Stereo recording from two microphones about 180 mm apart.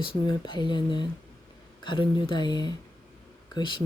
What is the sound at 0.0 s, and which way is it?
Speech, 25° left (ahead or behind).